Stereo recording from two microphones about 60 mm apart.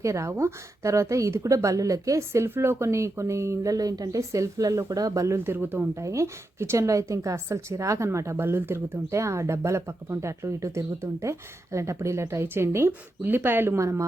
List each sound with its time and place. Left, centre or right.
0.0 s a woman's voice: right
4.2 s speech: right
5.4 s speech: right
6.0 s a woman's voice: right
13.2 s speech: right
13.7 s a woman's voice: right